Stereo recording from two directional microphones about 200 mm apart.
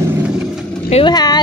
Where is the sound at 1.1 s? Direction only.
20° left (ahead or behind).